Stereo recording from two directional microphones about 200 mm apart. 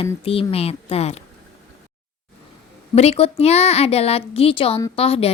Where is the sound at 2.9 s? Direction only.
30° left (ahead or behind).